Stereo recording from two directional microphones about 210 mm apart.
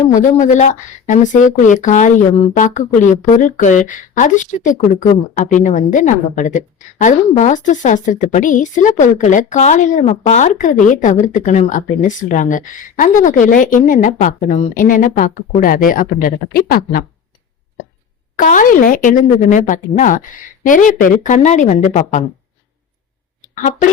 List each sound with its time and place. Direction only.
0.1 s speech: 35° left (ahead or behind)
18.3 s speech: 40° left (ahead or behind)